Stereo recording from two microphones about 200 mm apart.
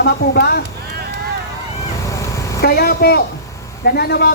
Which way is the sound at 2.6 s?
50° left (ahead or behind).